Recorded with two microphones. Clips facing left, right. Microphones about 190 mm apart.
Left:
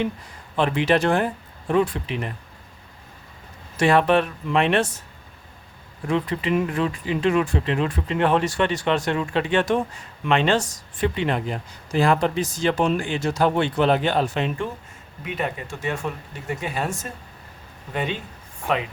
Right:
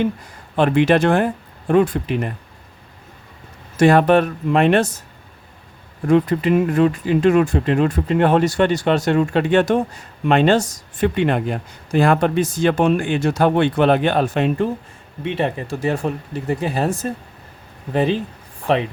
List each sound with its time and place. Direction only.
0.5 s speech: 55° right (ahead or behind)
3.8 s speech: 45° right (ahead or behind)
6.1 s speech: 50° right (ahead or behind)
11.1 s speech: 55° right (ahead or behind)
15.2 s speech: 30° right (ahead or behind)